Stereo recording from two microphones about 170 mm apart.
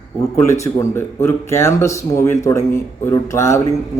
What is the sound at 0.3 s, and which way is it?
Speech, 15° left (ahead or behind).